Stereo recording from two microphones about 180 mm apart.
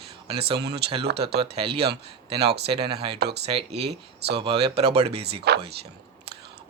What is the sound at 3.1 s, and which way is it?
Speech, 65° right (ahead or behind).